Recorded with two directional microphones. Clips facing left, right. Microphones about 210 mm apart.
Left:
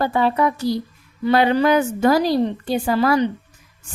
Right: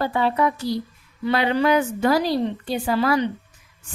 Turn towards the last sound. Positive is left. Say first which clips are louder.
# left 3 dB
turn(degrees=45)  # may be behind; listen again after turning